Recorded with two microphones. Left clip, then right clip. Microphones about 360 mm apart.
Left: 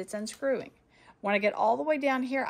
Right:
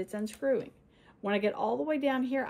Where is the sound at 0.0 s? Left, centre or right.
Centre.